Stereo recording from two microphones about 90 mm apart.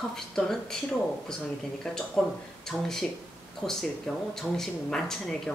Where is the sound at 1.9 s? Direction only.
5° left (ahead or behind).